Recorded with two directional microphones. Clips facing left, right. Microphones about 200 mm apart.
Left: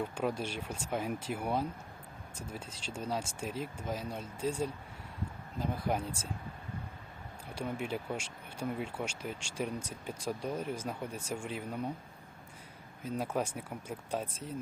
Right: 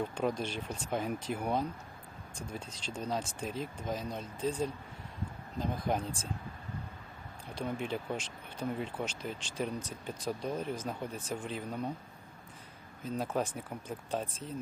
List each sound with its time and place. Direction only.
0.0 s speech: 5° left (ahead or behind)
7.5 s speech: 10° left (ahead or behind)
13.0 s speech: 10° left (ahead or behind)